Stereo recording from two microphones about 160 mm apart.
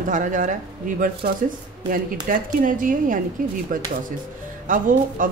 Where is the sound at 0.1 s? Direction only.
50° right (ahead or behind).